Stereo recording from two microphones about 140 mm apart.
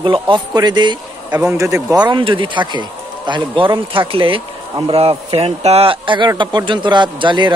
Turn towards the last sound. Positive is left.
turn(degrees=-35)  # may be behind; listen again after turning